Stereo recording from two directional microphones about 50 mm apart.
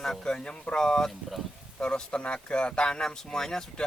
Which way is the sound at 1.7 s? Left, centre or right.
Centre.